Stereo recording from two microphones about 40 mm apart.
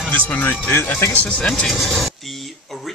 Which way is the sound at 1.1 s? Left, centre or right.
Left.